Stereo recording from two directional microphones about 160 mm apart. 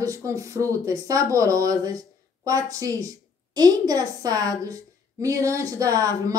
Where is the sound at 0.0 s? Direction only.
20° right (ahead or behind).